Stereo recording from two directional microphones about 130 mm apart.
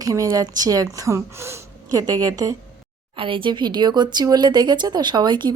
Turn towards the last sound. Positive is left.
turn(degrees=-35)  # may be behind; listen again after turning